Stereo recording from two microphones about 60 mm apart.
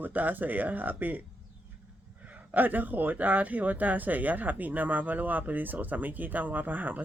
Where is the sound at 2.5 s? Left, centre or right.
Right.